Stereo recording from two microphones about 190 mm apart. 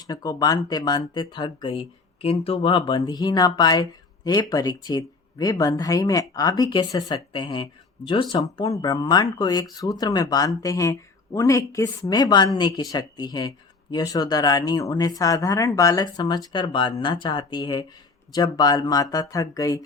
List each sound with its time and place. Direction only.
0.1 s speech: 20° left (ahead or behind)